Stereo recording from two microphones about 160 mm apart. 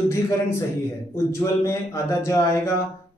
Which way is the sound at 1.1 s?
20° left (ahead or behind).